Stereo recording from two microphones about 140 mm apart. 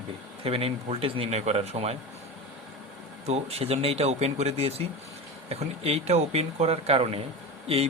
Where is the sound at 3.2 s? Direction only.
50° right (ahead or behind).